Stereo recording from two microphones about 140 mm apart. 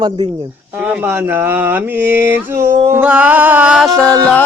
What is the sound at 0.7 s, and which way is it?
A man's voice, 10° right (ahead or behind).